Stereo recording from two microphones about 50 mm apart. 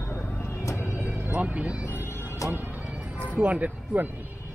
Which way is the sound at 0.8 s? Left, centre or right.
Right.